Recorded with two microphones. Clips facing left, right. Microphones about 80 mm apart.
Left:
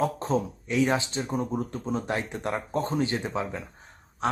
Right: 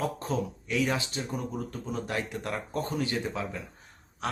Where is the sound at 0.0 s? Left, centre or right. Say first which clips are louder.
Left 5 dB; left.